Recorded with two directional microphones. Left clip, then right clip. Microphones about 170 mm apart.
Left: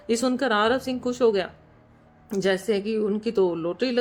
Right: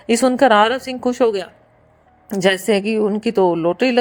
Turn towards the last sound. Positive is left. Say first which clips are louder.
# right 9 dB
turn(degrees=-35)  # may be behind; listen again after turning